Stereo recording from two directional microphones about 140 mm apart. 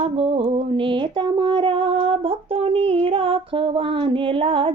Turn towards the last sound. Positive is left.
turn(degrees=-40)  # may be behind; listen again after turning